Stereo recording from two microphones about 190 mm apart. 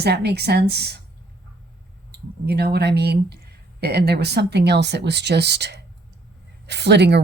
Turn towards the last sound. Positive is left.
turn(degrees=-65)  # may be behind; listen again after turning